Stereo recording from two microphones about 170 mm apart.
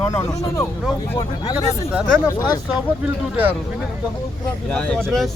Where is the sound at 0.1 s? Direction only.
20° left (ahead or behind).